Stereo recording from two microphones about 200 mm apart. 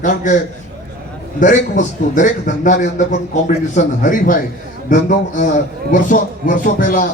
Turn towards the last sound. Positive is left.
turn(degrees=45)  # may be behind; listen again after turning